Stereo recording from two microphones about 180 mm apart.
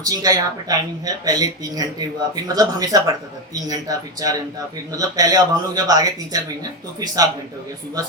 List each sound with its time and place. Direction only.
0.0 s speech: 20° right (ahead or behind)